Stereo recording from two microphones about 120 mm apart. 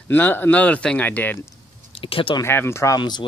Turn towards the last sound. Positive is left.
turn(degrees=40)  # may be behind; listen again after turning